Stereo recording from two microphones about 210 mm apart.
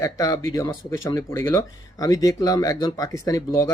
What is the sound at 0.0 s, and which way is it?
Speech, 15° left (ahead or behind).